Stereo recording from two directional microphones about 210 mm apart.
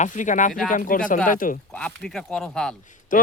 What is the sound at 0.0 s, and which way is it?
Speech, 35° left (ahead or behind).